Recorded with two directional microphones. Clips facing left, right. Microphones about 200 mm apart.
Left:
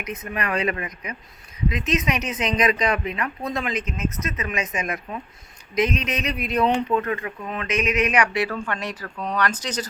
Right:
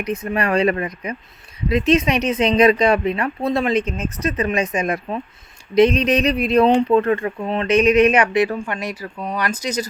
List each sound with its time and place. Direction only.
0.0 s speech: 30° right (ahead or behind); by 9.8 s 10° right (ahead or behind)